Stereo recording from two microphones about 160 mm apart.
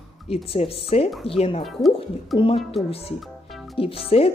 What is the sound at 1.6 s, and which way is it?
Speech, centre (ahead or behind).